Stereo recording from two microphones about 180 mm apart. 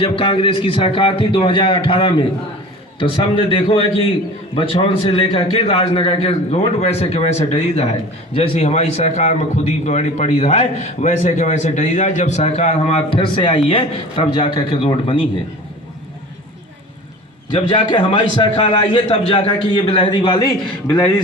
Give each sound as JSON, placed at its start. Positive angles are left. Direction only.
{"t": 0.0, "sound": "a man's voice", "side_deg": 30}
{"t": 17.5, "sound": "a man's voice", "side_deg": 25}